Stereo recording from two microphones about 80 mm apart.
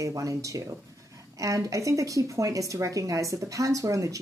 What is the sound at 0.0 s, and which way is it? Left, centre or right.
A woman's voice, right.